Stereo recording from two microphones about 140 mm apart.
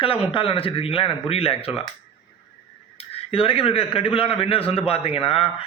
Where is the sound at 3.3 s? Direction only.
40° left (ahead or behind).